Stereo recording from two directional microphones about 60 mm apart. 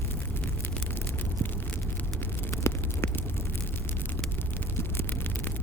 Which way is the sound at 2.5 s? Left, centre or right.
Left.